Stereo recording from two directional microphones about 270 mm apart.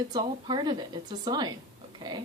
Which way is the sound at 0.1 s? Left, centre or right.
Centre.